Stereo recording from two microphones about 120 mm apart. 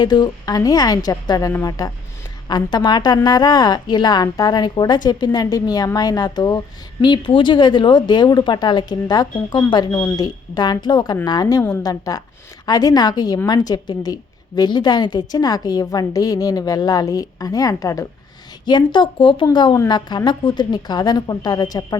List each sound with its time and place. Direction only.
0.0 s a woman's voice: 35° left (ahead or behind)
18.6 s a woman's voice: 40° left (ahead or behind)